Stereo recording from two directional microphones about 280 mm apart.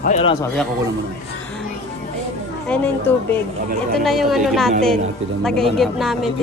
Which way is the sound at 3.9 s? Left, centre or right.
Centre.